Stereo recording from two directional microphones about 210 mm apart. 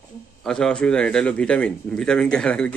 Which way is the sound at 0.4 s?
5° left (ahead or behind).